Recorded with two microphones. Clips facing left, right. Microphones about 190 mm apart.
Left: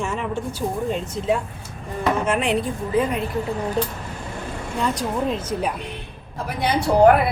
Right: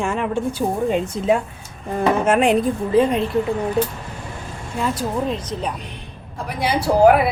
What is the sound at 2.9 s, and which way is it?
Speech, 30° right (ahead or behind).